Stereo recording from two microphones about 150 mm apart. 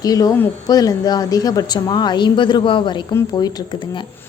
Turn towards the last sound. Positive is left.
turn(degrees=30)  # may be behind; listen again after turning